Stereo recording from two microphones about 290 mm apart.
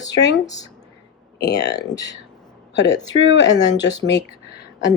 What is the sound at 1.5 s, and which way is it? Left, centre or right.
Speech, left.